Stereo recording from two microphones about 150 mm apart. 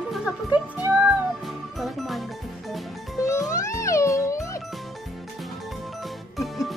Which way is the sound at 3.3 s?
20° left (ahead or behind).